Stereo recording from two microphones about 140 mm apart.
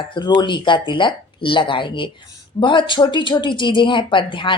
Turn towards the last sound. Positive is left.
turn(degrees=35)  # may be behind; listen again after turning